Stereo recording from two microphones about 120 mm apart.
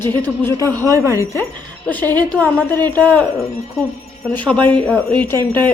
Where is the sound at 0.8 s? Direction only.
25° right (ahead or behind).